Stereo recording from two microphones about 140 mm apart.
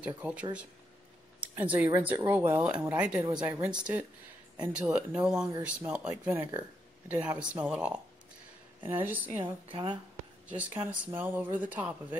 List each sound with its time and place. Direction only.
0.0 s speech: 10° right (ahead or behind)
1.6 s speech: 10° right (ahead or behind)
9.7 s speech: 35° right (ahead or behind)
10.5 s speech: 10° right (ahead or behind)